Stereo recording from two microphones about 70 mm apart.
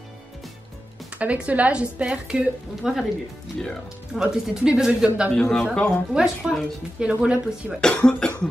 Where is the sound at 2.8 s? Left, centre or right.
Centre.